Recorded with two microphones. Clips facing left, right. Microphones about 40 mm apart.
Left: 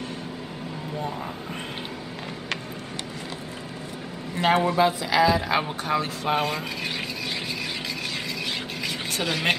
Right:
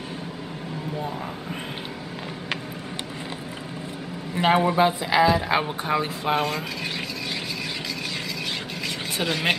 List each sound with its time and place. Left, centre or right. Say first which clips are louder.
4.4 s a man's voice: right 1 dB; centre
6.2 s speech: right 1 dB; centre
9.1 s speech: right 1 dB; centre